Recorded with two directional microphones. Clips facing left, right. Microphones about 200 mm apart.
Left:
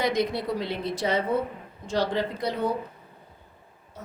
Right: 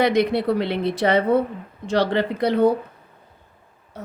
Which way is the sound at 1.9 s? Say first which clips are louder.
Right 6 dB; 70° right (ahead or behind).